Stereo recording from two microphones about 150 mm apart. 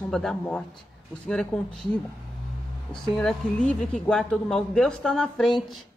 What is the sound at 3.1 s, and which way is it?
Speech, 5° left (ahead or behind).